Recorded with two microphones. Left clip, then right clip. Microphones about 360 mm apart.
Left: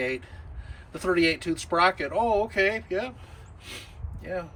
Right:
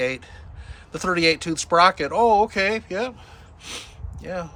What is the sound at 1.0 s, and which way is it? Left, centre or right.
Speech, centre.